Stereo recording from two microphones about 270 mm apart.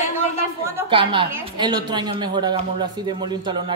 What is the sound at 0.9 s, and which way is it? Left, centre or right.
A woman's voice, centre.